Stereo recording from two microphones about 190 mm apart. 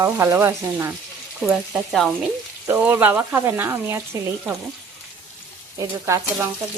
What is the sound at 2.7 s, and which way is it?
Speech, 10° right (ahead or behind).